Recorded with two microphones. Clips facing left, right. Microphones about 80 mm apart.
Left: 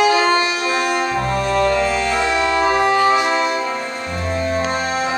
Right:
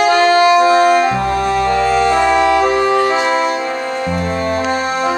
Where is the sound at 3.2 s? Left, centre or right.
Right.